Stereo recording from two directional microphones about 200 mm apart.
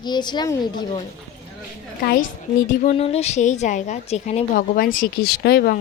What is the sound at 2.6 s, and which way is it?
A woman's voice, 35° left (ahead or behind).